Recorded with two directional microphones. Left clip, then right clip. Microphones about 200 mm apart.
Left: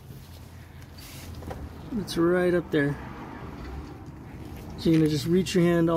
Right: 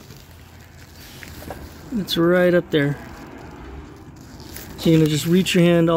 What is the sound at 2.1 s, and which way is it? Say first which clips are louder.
Speech: right 7 dB; 40° right (ahead or behind).